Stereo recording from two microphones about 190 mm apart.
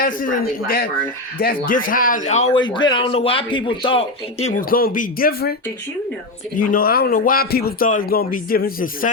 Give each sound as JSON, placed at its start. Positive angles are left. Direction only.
{"t": 0.0, "sound": "speech", "side_deg": 45}
{"t": 2.6, "sound": "speech", "side_deg": 25}
{"t": 4.7, "sound": "speech", "side_deg": 50}
{"t": 6.6, "sound": "speech", "side_deg": 45}